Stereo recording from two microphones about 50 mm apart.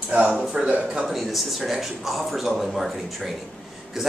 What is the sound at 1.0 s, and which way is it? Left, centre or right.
Speech, centre.